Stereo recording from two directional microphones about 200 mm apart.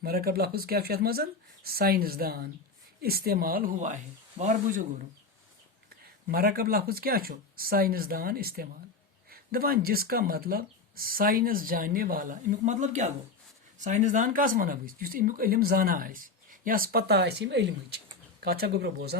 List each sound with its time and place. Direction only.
0.0 s speech: 50° right (ahead or behind)
6.2 s speech: 45° right (ahead or behind)